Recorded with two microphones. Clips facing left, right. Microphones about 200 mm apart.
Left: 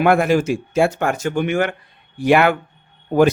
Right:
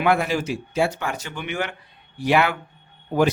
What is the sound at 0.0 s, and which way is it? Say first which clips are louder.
Speech: left 6 dB; 50° left (ahead or behind).